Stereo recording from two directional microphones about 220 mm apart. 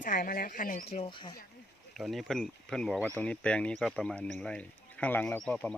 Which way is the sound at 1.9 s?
Centre (ahead or behind).